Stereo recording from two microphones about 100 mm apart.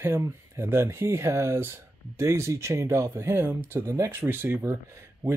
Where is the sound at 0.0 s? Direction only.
25° right (ahead or behind).